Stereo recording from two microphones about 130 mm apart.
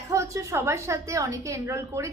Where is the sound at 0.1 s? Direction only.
25° right (ahead or behind).